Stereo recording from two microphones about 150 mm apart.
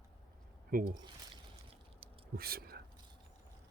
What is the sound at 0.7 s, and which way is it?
Speech, 70° right (ahead or behind).